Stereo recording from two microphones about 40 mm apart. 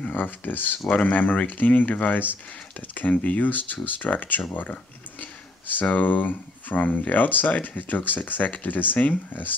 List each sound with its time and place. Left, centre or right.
0.1 s speech: left
0.8 s speech: left
1.1 s speech: left